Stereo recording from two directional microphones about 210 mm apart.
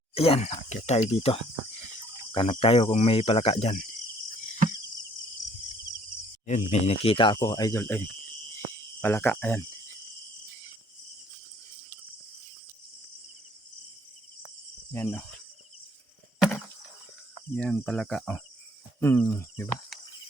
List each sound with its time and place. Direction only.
0.1 s speech: 30° left (ahead or behind)
6.4 s speech: 35° left (ahead or behind); by 8.0 s 10° left (ahead or behind)
8.5 s cricket: 10° left (ahead or behind)
14.9 s speech: 10° left (ahead or behind)
17.6 s cricket: 5° left (ahead or behind)
18.9 s speech: 10° left (ahead or behind)